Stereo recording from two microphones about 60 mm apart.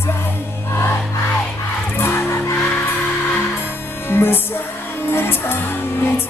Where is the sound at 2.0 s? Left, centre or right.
Left.